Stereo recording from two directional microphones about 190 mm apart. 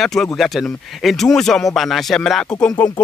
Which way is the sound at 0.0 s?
Centre (ahead or behind).